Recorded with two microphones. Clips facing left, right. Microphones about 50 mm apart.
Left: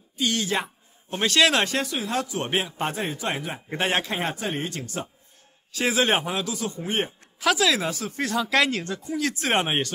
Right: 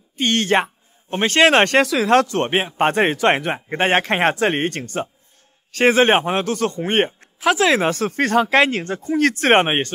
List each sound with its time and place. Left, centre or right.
0.2 s speech: right
1.1 s speech: right
1.6 s speech: right
2.4 s speech: right
2.9 s speech: right
3.6 s speech: right
7.4 s speech: right
8.5 s speech: right